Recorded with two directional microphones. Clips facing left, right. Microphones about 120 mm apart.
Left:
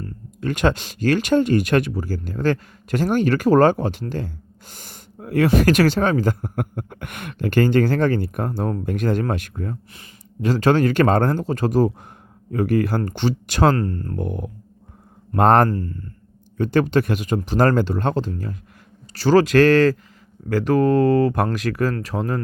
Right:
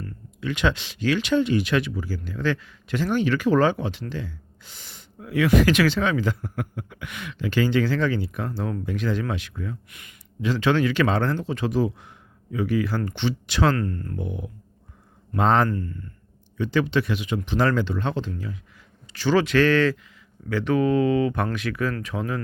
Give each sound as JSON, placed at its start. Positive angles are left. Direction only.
{"t": 0.3, "sound": "speech", "side_deg": 45}
{"t": 9.9, "sound": "speech", "side_deg": 30}
{"t": 10.4, "sound": "speech", "side_deg": 45}
{"t": 14.2, "sound": "speech", "side_deg": 50}
{"t": 15.7, "sound": "speech", "side_deg": 35}
{"t": 16.6, "sound": "speech", "side_deg": 50}